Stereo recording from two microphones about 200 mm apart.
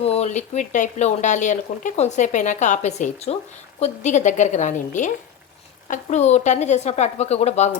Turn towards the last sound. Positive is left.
turn(degrees=35)  # may be behind; listen again after turning